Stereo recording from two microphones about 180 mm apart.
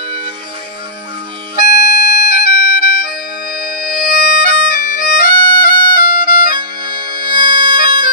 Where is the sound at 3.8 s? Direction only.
55° left (ahead or behind).